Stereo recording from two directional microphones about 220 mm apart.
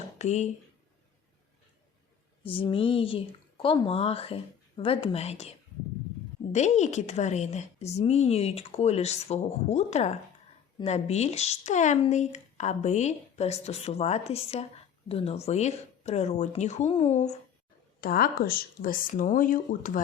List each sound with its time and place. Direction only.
0.2 s speech: 30° left (ahead or behind)
2.4 s speech: 25° left (ahead or behind)
18.0 s speech: 40° left (ahead or behind)